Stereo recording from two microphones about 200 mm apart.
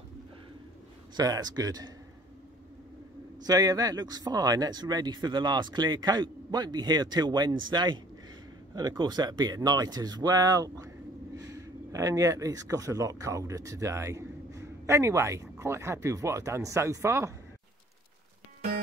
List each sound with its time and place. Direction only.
1.1 s speech: 20° right (ahead or behind)
3.4 s speech: 20° right (ahead or behind)